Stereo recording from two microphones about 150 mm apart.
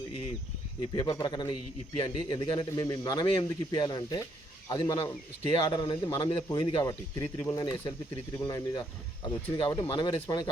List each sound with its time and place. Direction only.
0.8 s a man's voice: 30° left (ahead or behind)
6.8 s a man's voice: 20° left (ahead or behind)